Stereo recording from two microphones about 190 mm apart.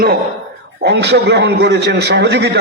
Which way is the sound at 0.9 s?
65° right (ahead or behind).